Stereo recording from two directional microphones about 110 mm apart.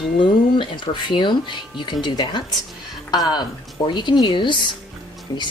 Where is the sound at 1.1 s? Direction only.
45° left (ahead or behind).